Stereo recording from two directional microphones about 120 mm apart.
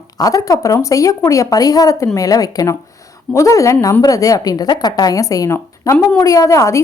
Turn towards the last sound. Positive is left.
turn(degrees=25)  # may be behind; listen again after turning